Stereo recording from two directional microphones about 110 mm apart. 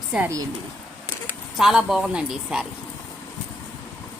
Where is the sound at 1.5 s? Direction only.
5° right (ahead or behind).